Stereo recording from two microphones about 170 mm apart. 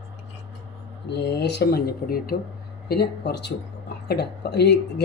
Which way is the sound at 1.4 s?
75° left (ahead or behind).